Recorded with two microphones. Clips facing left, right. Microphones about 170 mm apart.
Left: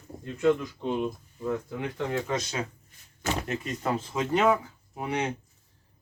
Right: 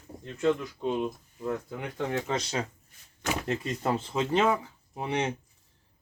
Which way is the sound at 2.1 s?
30° right (ahead or behind).